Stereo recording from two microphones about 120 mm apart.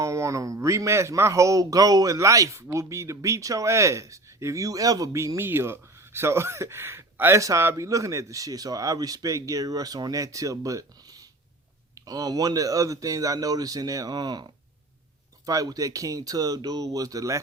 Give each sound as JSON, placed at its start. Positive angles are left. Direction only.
{"t": 0.0, "sound": "a man's voice", "side_deg": -25}